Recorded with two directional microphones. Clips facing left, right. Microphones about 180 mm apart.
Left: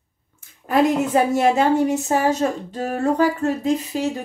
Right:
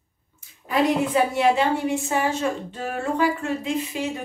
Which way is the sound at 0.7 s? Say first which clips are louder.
Left 3 dB; 45° left (ahead or behind).